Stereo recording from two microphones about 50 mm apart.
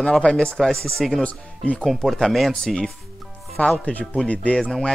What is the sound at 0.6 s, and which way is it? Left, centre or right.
Speech, centre.